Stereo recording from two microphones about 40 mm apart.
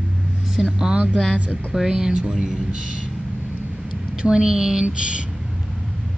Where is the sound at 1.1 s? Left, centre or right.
Right.